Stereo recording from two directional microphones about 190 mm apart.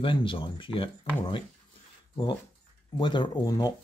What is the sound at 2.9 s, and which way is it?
Speech, 25° left (ahead or behind).